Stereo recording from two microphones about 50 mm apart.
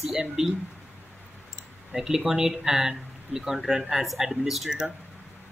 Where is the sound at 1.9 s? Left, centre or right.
Centre.